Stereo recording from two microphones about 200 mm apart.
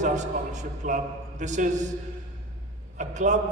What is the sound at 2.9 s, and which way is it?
Speech, 35° right (ahead or behind).